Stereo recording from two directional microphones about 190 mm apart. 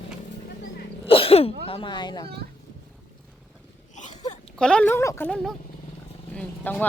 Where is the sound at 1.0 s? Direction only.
30° left (ahead or behind).